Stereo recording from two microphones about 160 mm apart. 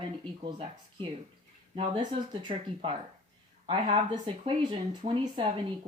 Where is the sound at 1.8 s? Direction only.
30° right (ahead or behind).